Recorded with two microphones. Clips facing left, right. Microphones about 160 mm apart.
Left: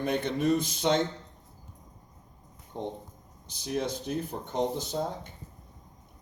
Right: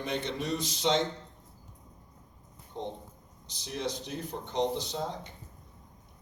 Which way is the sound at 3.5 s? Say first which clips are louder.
Left 4 dB; 50° left (ahead or behind).